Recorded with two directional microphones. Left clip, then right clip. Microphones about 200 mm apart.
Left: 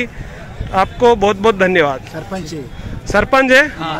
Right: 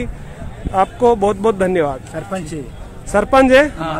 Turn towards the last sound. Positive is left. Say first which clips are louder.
# even
turn(degrees=0)  # may be behind; listen again after turning